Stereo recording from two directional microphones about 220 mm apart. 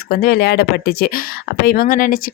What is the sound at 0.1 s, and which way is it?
Speech, 40° left (ahead or behind).